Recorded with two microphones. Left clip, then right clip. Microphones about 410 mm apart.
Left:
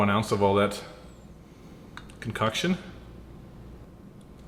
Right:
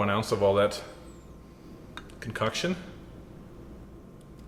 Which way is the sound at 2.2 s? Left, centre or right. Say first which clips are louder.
Left 2 dB; centre.